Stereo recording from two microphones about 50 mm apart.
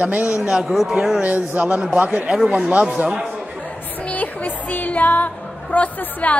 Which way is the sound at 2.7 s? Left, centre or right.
Right.